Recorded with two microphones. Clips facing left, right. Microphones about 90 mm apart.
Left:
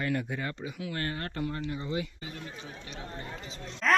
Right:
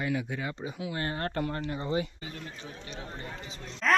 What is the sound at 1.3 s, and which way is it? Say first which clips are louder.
Speech: right 2 dB; 50° right (ahead or behind).